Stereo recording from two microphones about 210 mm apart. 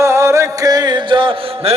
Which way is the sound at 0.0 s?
15° right (ahead or behind).